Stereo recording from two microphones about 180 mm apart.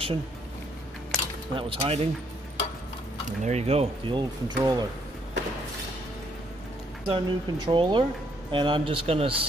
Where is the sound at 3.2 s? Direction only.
40° right (ahead or behind); by 4.8 s 20° right (ahead or behind).